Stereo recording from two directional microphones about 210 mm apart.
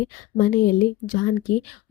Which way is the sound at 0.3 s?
40° left (ahead or behind).